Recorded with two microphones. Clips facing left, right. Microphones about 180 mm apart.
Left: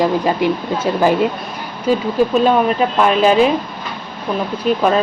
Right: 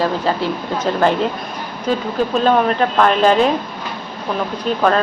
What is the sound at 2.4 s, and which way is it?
Speech, 10° left (ahead or behind).